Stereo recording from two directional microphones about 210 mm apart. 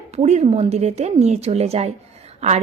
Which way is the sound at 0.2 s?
35° right (ahead or behind).